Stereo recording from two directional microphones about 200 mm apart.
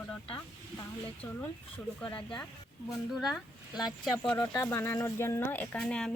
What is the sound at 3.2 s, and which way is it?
Speech, centre (ahead or behind).